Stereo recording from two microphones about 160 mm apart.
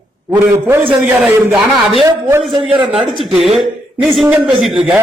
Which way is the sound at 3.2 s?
Centre (ahead or behind).